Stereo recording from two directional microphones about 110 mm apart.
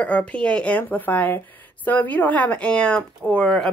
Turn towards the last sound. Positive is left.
turn(degrees=10)  # may be behind; listen again after turning